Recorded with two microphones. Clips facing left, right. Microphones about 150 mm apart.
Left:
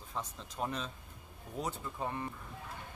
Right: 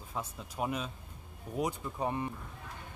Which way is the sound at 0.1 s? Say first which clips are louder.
Right 2 dB; 10° right (ahead or behind).